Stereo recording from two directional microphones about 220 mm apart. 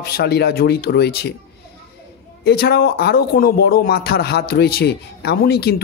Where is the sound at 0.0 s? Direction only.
45° left (ahead or behind).